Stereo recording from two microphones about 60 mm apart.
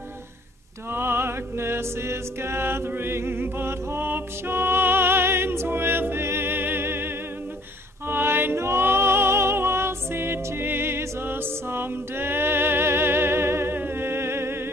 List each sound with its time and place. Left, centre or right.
0.9 s music: right
8.1 s music: right